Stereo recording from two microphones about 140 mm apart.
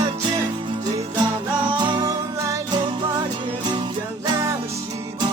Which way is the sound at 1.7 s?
30° right (ahead or behind).